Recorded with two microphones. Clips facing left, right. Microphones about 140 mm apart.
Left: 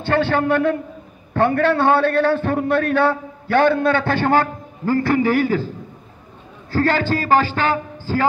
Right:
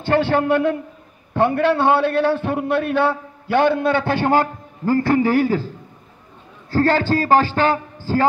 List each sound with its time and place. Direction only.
0.1 s a man's voice: 15° right (ahead or behind)
4.8 s a man's voice: 35° right (ahead or behind)
6.7 s a man's voice: 30° right (ahead or behind)